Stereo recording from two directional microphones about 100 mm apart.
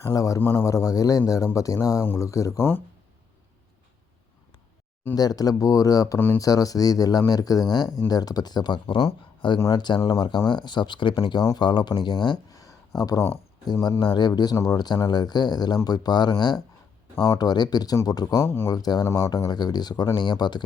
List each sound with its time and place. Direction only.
0.0 s speech: 35° left (ahead or behind)
0.3 s speech: 20° left (ahead or behind)
5.1 s speech: 40° left (ahead or behind)
6.1 s speech: 20° left (ahead or behind)
6.4 s speech: 35° left (ahead or behind); by 9.6 s 55° left (ahead or behind)
9.6 s speech: 30° left (ahead or behind)
10.1 s speech: 45° left (ahead or behind)
13.0 s speech: 35° left (ahead or behind)
18.4 s speech: 25° left (ahead or behind)
18.7 s speech: 40° left (ahead or behind)